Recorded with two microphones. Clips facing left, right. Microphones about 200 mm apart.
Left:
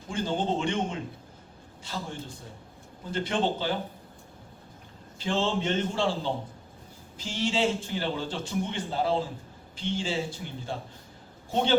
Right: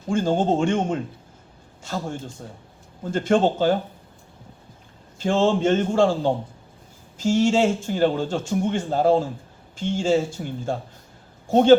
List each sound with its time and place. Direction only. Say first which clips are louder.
0.1 s a man's voice: right 8 dB; 45° right (ahead or behind)
5.2 s a man's voice: right 8 dB; 45° right (ahead or behind)